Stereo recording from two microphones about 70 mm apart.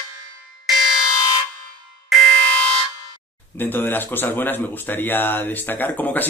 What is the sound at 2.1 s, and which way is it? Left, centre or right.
Music, centre.